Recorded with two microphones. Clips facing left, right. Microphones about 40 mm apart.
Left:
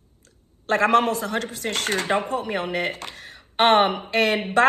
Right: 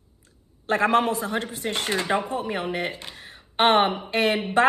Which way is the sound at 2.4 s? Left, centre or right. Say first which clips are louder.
Left 2 dB; left.